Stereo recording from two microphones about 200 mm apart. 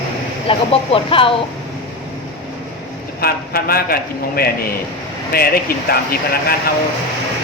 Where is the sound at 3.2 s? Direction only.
50° left (ahead or behind).